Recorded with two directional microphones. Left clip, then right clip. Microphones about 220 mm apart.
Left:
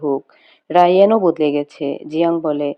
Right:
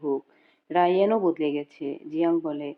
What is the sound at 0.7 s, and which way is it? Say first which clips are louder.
Speech: left 10 dB; 40° left (ahead or behind).